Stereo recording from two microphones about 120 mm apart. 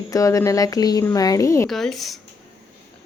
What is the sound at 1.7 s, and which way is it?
Speech, centre (ahead or behind).